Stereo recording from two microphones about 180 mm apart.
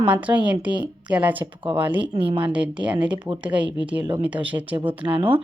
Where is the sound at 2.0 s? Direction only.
30° right (ahead or behind).